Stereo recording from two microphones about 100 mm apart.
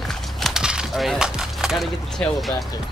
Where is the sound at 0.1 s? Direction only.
Centre (ahead or behind).